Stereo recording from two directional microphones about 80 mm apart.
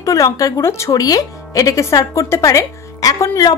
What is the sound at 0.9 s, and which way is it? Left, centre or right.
A woman's voice, left.